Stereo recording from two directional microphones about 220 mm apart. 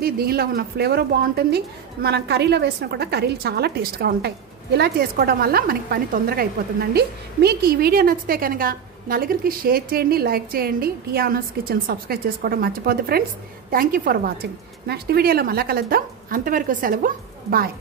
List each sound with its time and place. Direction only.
0.0 s a woman's voice: 45° right (ahead or behind)